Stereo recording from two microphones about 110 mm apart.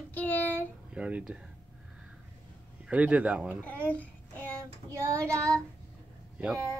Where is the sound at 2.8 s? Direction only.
10° right (ahead or behind).